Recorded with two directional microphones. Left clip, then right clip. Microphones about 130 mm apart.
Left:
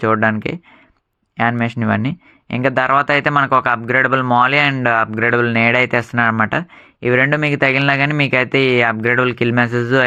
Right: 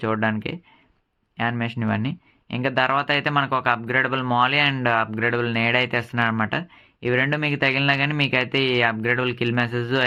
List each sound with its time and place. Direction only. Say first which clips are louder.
0.0 s speech: left 8 dB; 35° left (ahead or behind)